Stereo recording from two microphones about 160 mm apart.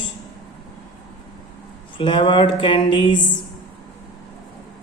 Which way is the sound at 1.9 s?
30° left (ahead or behind).